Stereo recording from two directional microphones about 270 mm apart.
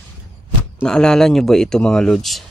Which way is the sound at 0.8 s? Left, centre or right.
Centre.